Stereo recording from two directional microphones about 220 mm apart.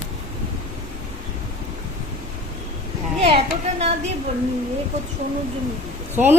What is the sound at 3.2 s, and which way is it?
Speech, 25° right (ahead or behind).